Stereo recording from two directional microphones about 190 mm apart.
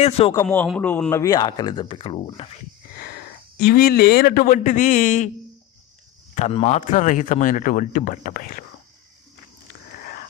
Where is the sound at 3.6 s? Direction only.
55° left (ahead or behind).